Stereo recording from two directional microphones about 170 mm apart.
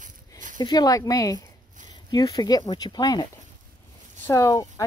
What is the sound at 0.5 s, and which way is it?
Speech, 25° left (ahead or behind).